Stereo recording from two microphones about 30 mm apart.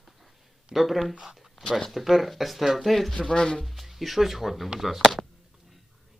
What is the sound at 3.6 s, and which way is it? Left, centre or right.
Speech, centre.